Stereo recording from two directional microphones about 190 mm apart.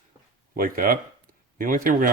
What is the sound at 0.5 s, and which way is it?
Speech, 50° right (ahead or behind).